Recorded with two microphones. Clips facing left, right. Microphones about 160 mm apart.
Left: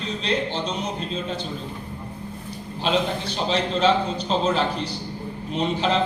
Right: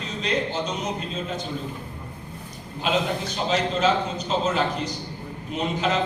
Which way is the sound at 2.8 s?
30° left (ahead or behind).